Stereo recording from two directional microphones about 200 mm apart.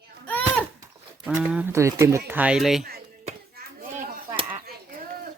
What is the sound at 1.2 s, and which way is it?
Speech, 5° right (ahead or behind).